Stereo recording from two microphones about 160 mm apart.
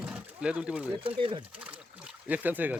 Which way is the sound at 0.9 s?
35° right (ahead or behind).